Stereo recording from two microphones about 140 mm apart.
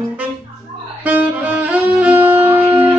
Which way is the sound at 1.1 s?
10° right (ahead or behind).